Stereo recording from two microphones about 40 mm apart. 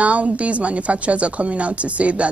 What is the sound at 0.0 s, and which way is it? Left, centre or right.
A woman's voice, right.